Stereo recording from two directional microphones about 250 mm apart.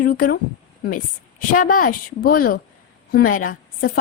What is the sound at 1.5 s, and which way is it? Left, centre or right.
A woman's voice, left.